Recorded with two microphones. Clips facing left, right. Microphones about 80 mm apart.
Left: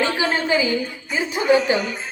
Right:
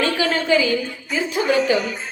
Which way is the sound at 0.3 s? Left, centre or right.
Left.